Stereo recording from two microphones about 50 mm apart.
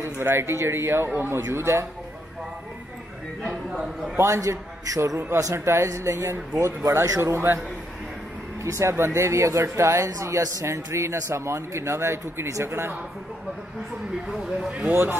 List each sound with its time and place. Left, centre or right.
0.0 s speech: right
1.4 s speech: right
4.2 s a man's voice: right
5.5 s speech: right
6.6 s speech: right
7.2 s a man's voice: right
8.6 s a man's voice: right
12.6 s speech: right
14.2 s speech: centre
14.6 s a man's voice: centre